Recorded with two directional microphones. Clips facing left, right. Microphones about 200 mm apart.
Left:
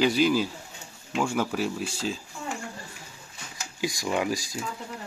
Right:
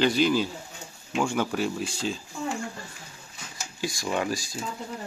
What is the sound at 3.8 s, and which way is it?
Speech, 20° left (ahead or behind).